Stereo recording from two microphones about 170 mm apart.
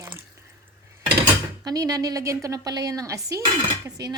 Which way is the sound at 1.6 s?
20° right (ahead or behind).